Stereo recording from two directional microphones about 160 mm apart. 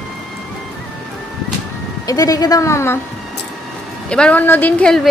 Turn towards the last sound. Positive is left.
turn(degrees=5)  # may be behind; listen again after turning